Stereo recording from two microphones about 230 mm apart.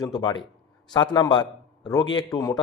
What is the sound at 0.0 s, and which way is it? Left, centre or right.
A man's voice, centre.